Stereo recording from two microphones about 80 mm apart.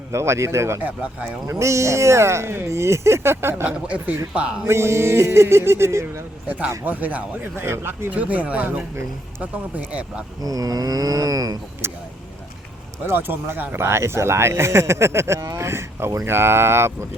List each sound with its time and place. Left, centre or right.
0.1 s speech: right
0.8 s speech: right
1.5 s speech: right
3.7 s speech: centre
4.6 s speech: right
6.7 s speech: right
8.1 s speech: centre
10.4 s cattle: right
11.8 s speech: right
13.1 s speech: right